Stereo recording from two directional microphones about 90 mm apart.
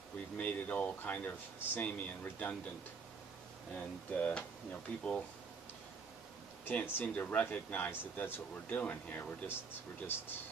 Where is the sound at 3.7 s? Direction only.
15° left (ahead or behind).